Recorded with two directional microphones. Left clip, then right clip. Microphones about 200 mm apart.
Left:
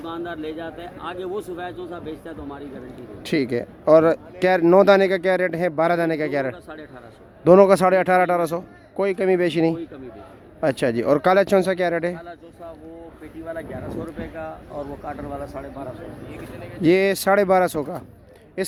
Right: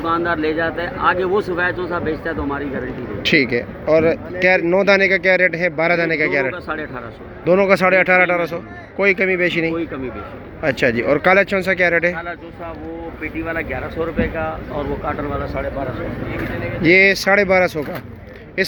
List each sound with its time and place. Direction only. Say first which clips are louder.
0.0 s speech: right 12 dB; 15° left (ahead or behind)
3.2 s speech: right 7 dB; 30° left (ahead or behind)
9.0 s speech: right 4 dB; 30° left (ahead or behind)
14.2 s speech: right 11 dB; 50° left (ahead or behind)
16.8 s speech: right 5 dB; 35° left (ahead or behind)